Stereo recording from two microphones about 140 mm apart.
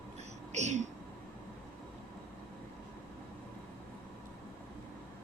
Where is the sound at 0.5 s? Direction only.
55° right (ahead or behind).